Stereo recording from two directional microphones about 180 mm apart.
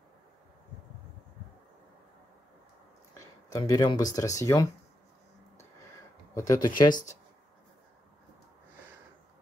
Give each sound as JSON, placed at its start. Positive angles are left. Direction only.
{"t": 3.2, "sound": "speech", "side_deg": 20}
{"t": 6.3, "sound": "speech", "side_deg": 20}
{"t": 6.9, "sound": "speech", "side_deg": 45}